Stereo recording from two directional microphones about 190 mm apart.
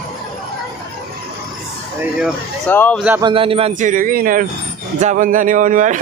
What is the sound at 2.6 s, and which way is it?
Speech, 10° left (ahead or behind).